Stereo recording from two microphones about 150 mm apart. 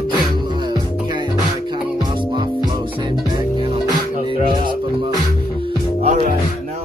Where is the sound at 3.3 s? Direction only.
35° right (ahead or behind).